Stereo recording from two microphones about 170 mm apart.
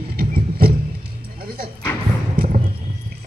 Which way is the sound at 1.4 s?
60° right (ahead or behind).